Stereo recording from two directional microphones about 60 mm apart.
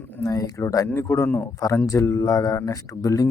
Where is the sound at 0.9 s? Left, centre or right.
Left.